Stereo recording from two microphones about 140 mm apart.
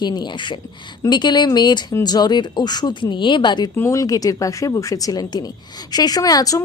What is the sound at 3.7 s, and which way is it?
Speech, 20° left (ahead or behind).